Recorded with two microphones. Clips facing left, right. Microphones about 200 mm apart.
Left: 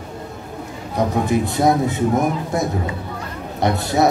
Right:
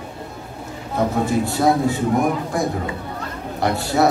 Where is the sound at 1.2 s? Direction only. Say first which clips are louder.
Left 2 dB; 20° left (ahead or behind).